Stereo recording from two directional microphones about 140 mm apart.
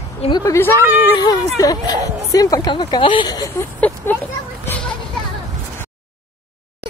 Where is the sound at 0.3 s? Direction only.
25° left (ahead or behind).